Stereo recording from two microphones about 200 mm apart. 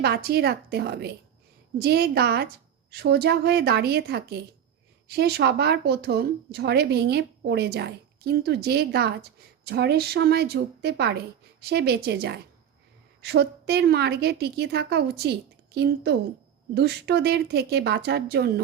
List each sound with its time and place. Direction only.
0.0 s a woman's voice: 50° right (ahead or behind)